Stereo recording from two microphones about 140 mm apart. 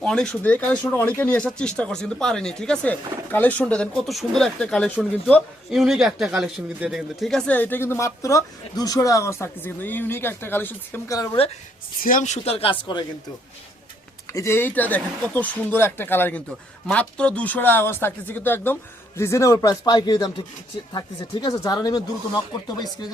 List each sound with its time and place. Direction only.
0.0 s speech: 5° left (ahead or behind)
12.0 s speech: 65° left (ahead or behind); by 12.7 s 45° left (ahead or behind)
14.3 s speech: 15° left (ahead or behind)
21.5 s speech: 25° left (ahead or behind)